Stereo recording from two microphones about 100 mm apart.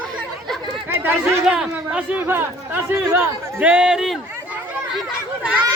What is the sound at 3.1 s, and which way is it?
A man's voice, 10° right (ahead or behind).